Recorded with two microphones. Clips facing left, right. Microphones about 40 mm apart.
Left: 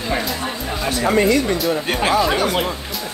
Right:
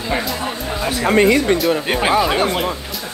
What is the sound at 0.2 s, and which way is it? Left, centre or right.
Chatter, centre.